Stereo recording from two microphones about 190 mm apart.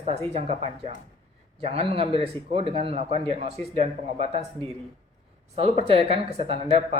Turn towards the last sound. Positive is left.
turn(degrees=-30)  # may be behind; listen again after turning